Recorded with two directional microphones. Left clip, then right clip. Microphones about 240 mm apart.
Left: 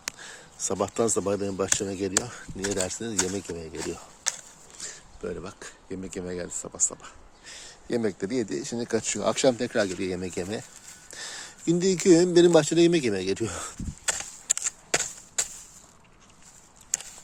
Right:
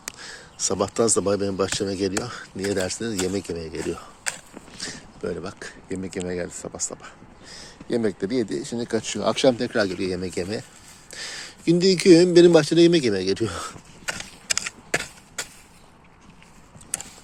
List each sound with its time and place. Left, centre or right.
0.0 s speech: centre
7.4 s speech: left
11.1 s a sound: centre